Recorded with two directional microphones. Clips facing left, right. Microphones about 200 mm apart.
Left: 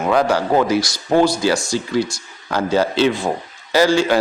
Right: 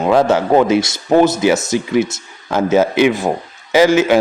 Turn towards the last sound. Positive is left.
turn(degrees=-20)  # may be behind; listen again after turning